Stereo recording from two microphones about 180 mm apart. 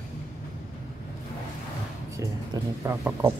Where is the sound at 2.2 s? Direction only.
15° right (ahead or behind).